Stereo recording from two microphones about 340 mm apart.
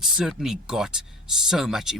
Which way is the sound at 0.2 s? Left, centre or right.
Centre.